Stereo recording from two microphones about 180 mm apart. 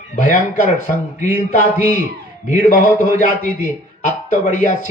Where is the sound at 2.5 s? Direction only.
45° left (ahead or behind).